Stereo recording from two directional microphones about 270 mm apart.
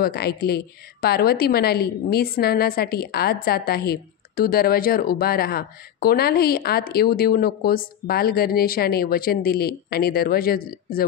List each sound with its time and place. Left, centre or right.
0.0 s a woman's voice: left